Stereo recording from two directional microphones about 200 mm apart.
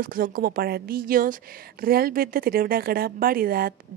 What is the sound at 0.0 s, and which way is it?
A woman's voice, 45° right (ahead or behind).